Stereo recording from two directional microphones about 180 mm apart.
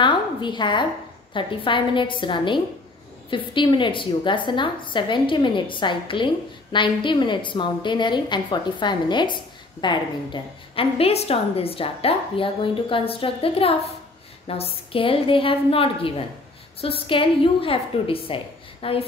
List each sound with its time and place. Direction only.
0.0 s a woman's voice: 25° left (ahead or behind)